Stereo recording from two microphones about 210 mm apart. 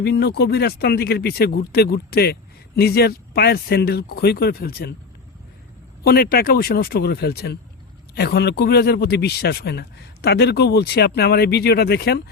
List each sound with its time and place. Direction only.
0.0 s speech: 50° left (ahead or behind)
6.0 s speech: 50° left (ahead or behind)